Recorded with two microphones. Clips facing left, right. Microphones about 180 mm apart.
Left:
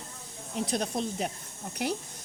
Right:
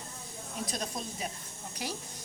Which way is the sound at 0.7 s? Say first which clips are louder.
Left 9 dB; 65° left (ahead or behind).